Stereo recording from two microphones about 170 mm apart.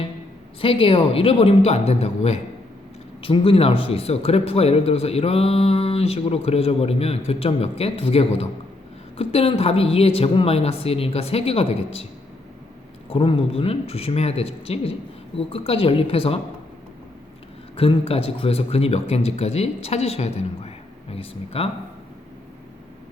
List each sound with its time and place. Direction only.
0.6 s a man's voice: 30° left (ahead or behind)
13.1 s a man's voice: 30° left (ahead or behind)
17.7 s a man's voice: 35° left (ahead or behind)